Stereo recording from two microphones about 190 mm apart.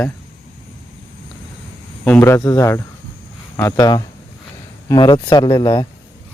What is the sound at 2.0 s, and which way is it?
Speech, 10° left (ahead or behind).